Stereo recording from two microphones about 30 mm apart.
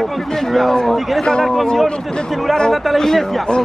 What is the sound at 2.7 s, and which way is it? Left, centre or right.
Speech, centre.